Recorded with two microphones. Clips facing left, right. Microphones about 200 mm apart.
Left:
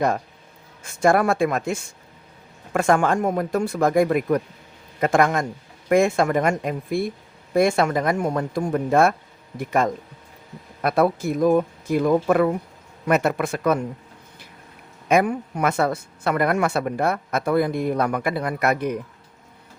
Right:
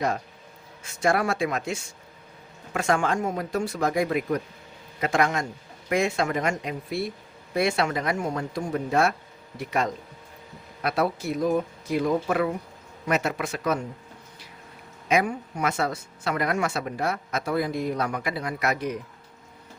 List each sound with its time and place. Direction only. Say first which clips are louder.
0.9 s speech: left 6 dB; 50° left (ahead or behind)
15.0 s speech: left 5 dB; 55° left (ahead or behind)